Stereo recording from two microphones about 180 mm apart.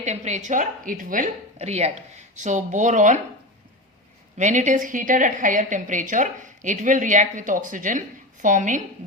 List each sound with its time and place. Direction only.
0.0 s a woman's voice: 40° right (ahead or behind)
4.4 s a woman's voice: 45° right (ahead or behind)